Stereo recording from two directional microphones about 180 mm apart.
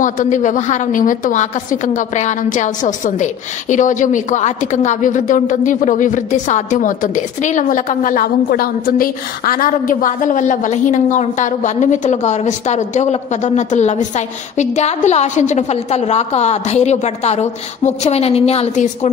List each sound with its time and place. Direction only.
0.0 s a woman's voice: 45° left (ahead or behind)